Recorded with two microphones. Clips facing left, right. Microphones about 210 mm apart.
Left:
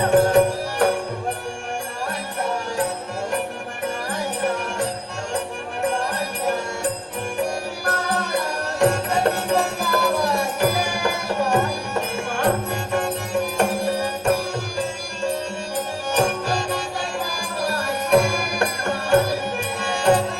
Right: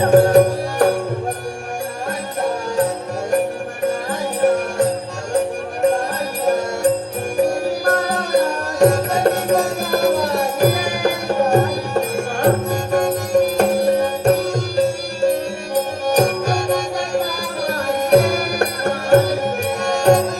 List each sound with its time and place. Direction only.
0.1 s music: 40° right (ahead or behind)
4.4 s music: 40° right (ahead or behind)
6.4 s music: 40° right (ahead or behind)